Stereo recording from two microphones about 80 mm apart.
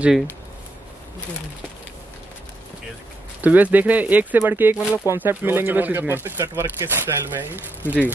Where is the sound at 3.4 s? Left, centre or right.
Centre.